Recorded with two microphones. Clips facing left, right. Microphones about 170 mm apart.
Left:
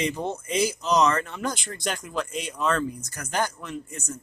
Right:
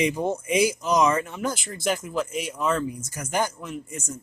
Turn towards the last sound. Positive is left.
turn(degrees=-10)  # may be behind; listen again after turning